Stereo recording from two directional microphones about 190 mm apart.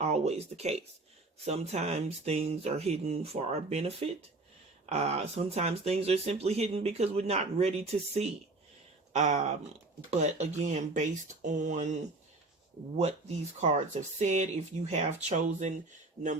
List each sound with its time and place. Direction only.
0.0 s speech: 35° right (ahead or behind)
13.6 s speech: 40° right (ahead or behind)